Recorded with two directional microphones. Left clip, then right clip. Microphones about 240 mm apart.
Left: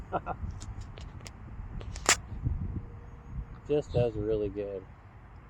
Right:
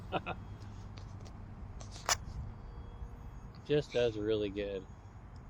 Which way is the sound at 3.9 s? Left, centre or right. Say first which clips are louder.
Left 2 dB; left.